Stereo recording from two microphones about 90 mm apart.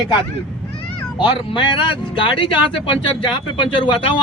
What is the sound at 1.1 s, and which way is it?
Speech, 70° left (ahead or behind).